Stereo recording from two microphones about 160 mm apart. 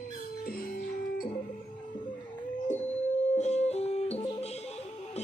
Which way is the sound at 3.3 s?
45° left (ahead or behind).